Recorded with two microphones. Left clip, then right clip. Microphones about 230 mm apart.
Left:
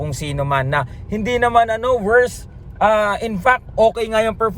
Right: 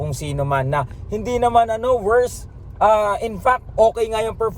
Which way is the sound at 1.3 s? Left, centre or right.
Left.